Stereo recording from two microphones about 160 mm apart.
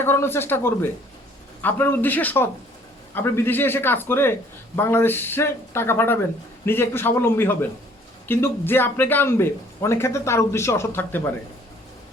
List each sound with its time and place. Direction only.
0.0 s a man's voice: 15° left (ahead or behind)